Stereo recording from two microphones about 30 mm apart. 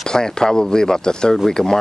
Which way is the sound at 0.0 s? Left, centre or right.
Left.